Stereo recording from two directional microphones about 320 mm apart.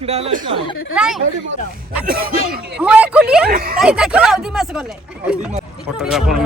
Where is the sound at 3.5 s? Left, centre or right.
Right.